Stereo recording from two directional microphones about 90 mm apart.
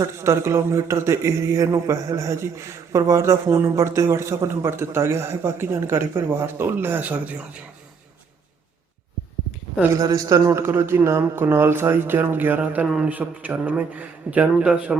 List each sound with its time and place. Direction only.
0.0 s a man's voice: 30° right (ahead or behind)
9.9 s a man's voice: 40° right (ahead or behind); by 14.9 s 15° right (ahead or behind)